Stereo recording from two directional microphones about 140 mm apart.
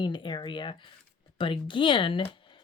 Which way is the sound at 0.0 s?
35° left (ahead or behind).